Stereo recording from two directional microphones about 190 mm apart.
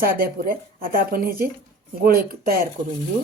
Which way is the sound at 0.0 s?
50° right (ahead or behind).